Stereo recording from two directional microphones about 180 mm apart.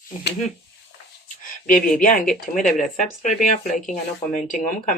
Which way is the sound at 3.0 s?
40° left (ahead or behind).